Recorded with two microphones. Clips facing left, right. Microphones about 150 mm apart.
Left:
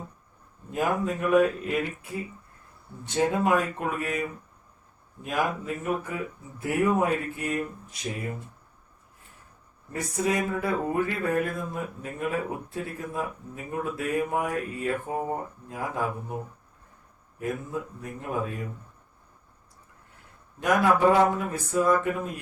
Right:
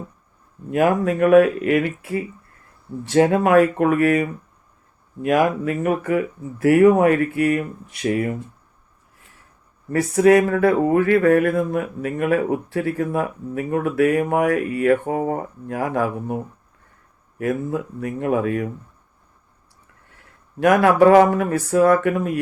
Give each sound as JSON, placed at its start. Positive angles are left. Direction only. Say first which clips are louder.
{"t": 0.7, "sound": "speech", "louder": "right 9 dB", "side_deg": -75}
{"t": 9.9, "sound": "speech", "louder": "right 13 dB", "side_deg": -75}
{"t": 20.6, "sound": "speech", "louder": "right 8 dB", "side_deg": -80}